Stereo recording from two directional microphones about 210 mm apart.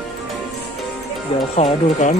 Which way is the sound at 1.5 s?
30° left (ahead or behind).